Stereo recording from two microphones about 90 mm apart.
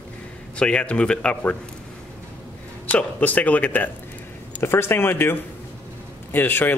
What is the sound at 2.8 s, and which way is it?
Speech, 15° left (ahead or behind).